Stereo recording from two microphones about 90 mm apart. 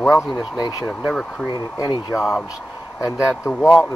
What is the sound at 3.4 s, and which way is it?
Speech, 30° left (ahead or behind).